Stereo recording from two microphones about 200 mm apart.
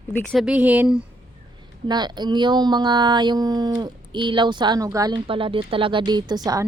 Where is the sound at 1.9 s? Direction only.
20° right (ahead or behind).